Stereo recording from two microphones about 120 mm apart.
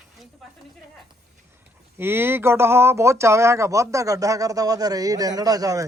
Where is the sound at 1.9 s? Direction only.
20° right (ahead or behind).